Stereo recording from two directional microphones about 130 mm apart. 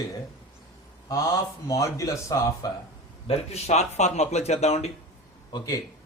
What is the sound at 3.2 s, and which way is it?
Speech, 50° left (ahead or behind).